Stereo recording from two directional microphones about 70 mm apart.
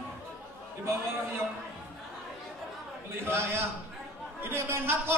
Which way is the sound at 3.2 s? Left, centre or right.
Right.